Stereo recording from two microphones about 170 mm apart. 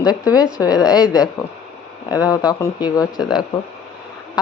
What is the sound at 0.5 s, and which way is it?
Speech, 20° left (ahead or behind).